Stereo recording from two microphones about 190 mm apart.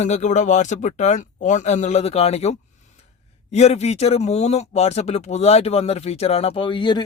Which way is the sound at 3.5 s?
35° left (ahead or behind).